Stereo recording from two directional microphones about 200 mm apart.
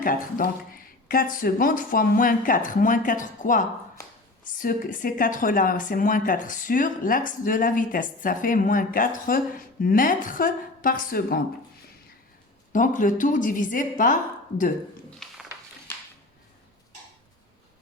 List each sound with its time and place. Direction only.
0.0 s speech: 45° left (ahead or behind)
12.7 s a woman's voice: 40° left (ahead or behind)
15.2 s a sound: centre (ahead or behind)